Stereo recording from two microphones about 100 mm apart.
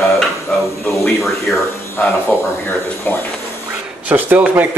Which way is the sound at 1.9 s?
20° left (ahead or behind).